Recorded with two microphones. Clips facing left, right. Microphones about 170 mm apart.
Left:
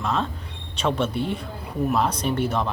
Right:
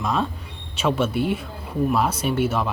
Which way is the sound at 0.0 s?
10° right (ahead or behind).